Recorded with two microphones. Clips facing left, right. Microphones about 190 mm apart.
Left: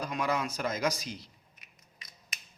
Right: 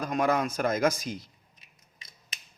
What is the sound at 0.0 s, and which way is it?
Speech, 50° right (ahead or behind).